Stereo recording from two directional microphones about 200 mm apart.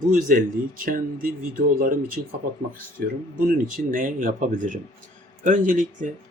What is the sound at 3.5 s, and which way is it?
Speech, 45° right (ahead or behind).